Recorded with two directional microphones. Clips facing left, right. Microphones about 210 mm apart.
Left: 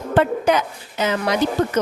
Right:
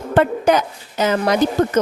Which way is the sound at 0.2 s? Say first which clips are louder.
Right 2 dB; 45° right (ahead or behind).